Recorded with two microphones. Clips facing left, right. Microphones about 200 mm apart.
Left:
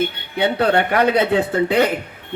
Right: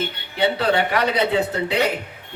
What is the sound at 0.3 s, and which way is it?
A man's voice, 55° left (ahead or behind).